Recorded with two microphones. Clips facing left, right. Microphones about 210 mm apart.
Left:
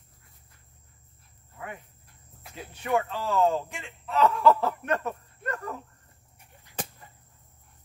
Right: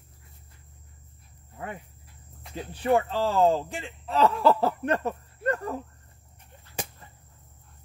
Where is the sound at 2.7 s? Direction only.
30° right (ahead or behind).